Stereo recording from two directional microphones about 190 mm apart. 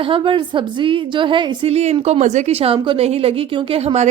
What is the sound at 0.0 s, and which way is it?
A woman's voice, 25° right (ahead or behind).